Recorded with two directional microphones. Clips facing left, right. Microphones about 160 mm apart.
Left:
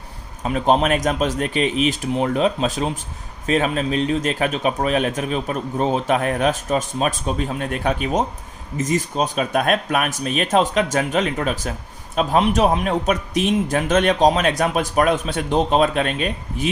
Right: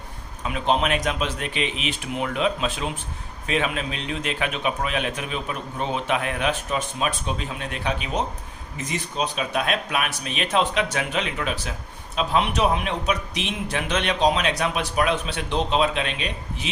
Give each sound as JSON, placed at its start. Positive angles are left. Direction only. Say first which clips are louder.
{"t": 0.4, "sound": "a man's voice", "louder": "left 5 dB", "side_deg": 40}